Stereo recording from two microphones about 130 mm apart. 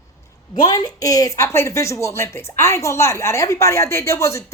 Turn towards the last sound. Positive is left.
turn(degrees=20)  # may be behind; listen again after turning